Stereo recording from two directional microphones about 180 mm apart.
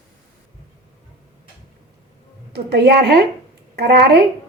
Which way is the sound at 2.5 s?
65° right (ahead or behind).